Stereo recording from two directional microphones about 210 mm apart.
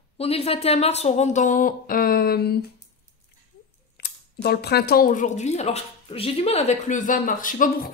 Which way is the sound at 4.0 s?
50° left (ahead or behind).